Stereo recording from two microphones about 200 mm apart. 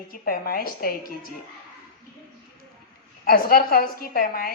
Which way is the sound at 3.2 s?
50° left (ahead or behind).